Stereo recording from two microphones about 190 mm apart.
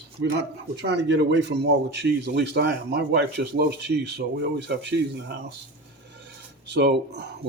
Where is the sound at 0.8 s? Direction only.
65° right (ahead or behind).